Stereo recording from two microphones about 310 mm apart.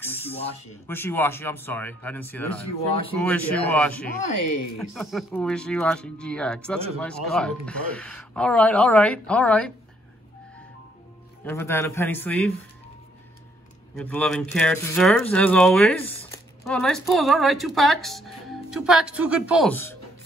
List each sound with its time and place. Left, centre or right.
0.8 s speech: centre
11.4 s speech: centre
13.9 s speech: centre